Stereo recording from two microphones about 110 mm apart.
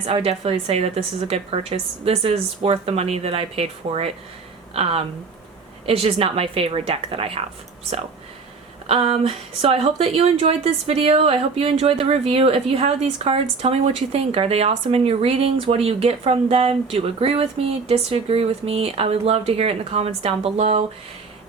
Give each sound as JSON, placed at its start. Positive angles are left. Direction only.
{"t": 0.0, "sound": "speech", "side_deg": -65}
{"t": 8.9, "sound": "speech", "side_deg": -65}